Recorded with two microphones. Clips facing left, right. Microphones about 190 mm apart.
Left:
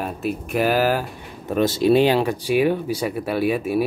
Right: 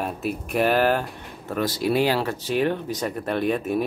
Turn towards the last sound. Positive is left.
turn(degrees=10)  # may be behind; listen again after turning